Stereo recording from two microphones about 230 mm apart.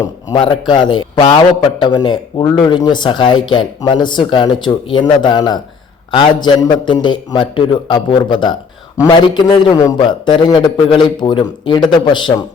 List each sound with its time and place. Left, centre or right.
0.3 s speech: centre